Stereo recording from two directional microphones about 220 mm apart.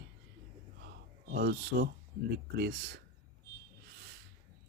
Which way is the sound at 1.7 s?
45° right (ahead or behind).